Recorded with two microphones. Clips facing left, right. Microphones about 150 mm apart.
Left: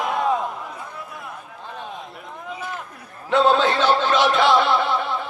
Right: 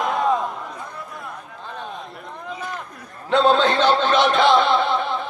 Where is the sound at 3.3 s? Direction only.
20° right (ahead or behind).